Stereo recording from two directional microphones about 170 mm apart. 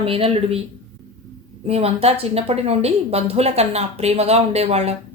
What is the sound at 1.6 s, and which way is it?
A woman's voice, 35° right (ahead or behind).